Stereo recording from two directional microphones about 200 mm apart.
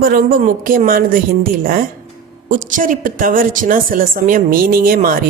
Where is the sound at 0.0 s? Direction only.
45° right (ahead or behind).